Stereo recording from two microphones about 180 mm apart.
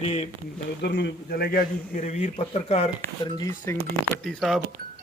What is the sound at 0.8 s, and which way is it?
A man's voice, 70° left (ahead or behind).